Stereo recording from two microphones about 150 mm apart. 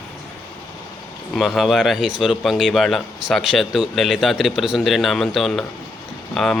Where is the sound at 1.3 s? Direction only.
Centre (ahead or behind).